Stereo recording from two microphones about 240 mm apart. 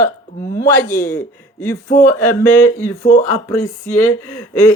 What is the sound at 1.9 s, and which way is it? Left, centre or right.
Speech, left.